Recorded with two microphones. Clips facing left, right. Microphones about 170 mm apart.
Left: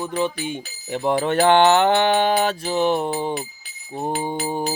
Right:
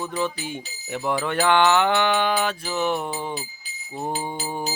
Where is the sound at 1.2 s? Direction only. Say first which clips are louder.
Left 4 dB; 30° left (ahead or behind).